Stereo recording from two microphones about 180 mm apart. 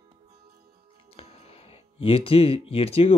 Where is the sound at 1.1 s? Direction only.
35° left (ahead or behind).